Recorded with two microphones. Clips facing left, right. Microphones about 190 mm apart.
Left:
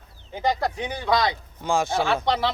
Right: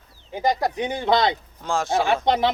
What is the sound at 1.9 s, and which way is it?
Speech, 20° right (ahead or behind).